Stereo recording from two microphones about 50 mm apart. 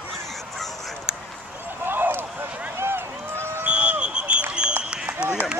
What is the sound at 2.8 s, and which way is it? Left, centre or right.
Run, right.